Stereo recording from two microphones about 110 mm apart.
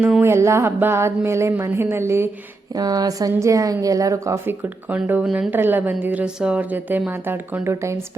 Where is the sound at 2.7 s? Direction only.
35° right (ahead or behind); by 5.3 s 15° right (ahead or behind).